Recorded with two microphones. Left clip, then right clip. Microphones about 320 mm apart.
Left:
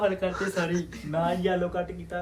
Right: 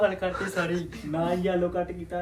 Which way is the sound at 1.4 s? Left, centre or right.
Centre.